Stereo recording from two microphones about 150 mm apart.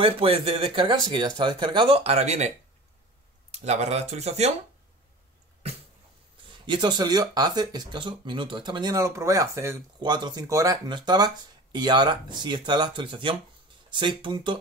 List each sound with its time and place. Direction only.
0.0 s speech: 40° right (ahead or behind)
3.5 s speech: 50° right (ahead or behind)
6.5 s speech: 30° right (ahead or behind)